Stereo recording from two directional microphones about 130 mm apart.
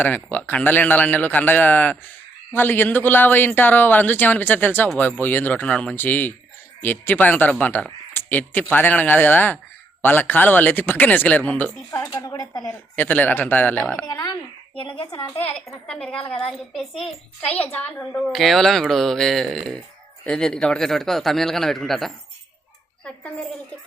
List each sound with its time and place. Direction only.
0.0 s a man's voice: 15° left (ahead or behind)
12.1 s speech: 30° left (ahead or behind)
12.6 s a man's voice: 15° left (ahead or behind)
14.0 s speech: 25° left (ahead or behind)
14.8 s speech: 40° left (ahead or behind)
15.9 s a man's voice: 10° left (ahead or behind)
18.3 s a man's voice: centre (ahead or behind)